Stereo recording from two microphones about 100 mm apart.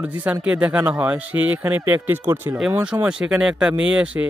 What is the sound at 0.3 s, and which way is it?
Speech, 15° right (ahead or behind).